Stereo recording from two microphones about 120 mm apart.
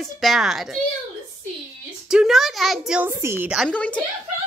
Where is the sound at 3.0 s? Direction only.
20° right (ahead or behind).